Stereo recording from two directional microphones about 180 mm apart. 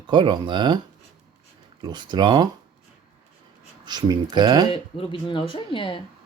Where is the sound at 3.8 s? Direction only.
20° right (ahead or behind).